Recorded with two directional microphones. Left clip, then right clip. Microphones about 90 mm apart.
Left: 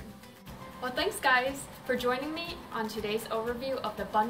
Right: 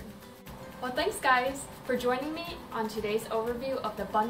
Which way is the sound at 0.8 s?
5° left (ahead or behind).